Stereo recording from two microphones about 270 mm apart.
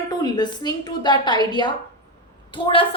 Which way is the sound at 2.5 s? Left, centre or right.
Centre.